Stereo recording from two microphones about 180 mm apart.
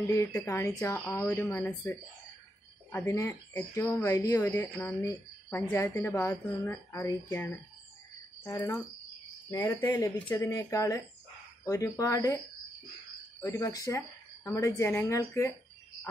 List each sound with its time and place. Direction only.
0.1 s speech: 20° left (ahead or behind)
8.5 s cricket: 20° left (ahead or behind)
10.2 s speech: 15° left (ahead or behind)
13.4 s cricket: 20° left (ahead or behind)
14.4 s speech: 15° left (ahead or behind)